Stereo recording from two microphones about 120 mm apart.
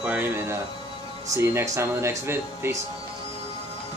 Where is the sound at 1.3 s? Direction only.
20° right (ahead or behind).